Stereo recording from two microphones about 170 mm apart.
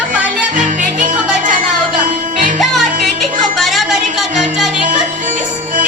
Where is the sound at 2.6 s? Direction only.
Centre (ahead or behind).